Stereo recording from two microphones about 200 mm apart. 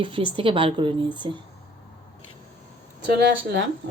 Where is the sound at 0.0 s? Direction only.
25° right (ahead or behind).